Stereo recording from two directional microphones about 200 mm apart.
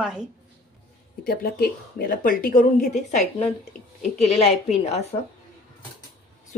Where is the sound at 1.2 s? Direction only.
50° left (ahead or behind).